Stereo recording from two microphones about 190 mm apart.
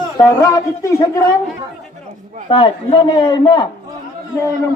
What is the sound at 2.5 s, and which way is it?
A man's voice, 30° left (ahead or behind).